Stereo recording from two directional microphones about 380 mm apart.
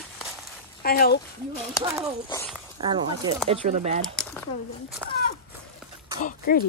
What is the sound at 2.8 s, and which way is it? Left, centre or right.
Speech, centre.